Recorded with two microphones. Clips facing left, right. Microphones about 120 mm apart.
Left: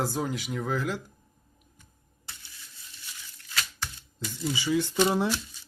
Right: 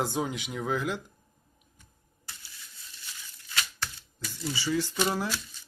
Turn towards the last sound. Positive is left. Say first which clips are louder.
# left 5 dB
turn(degrees=20)  # may be behind; listen again after turning